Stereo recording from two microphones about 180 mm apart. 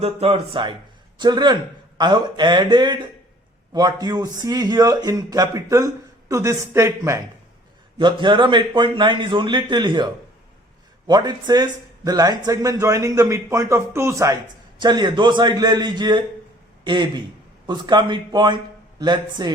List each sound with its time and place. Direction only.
0.0 s a man's voice: 35° right (ahead or behind); by 7.2 s 15° right (ahead or behind)
7.9 s a man's voice: 25° right (ahead or behind)